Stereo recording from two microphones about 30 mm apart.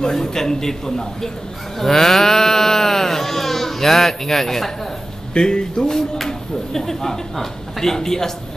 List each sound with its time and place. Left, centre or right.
0.0 s a man's voice: centre
5.3 s a man's voice: left